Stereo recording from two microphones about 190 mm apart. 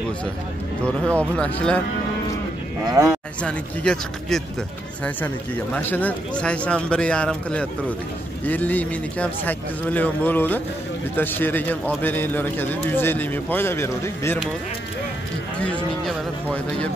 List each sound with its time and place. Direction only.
0.8 s speech: 5° left (ahead or behind)
3.0 s speech: 15° right (ahead or behind)
3.4 s a man's voice: 5° left (ahead or behind)
15.6 s a man's voice: 5° left (ahead or behind)